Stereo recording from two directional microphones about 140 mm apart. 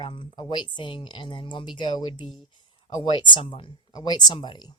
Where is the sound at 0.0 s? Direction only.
35° left (ahead or behind).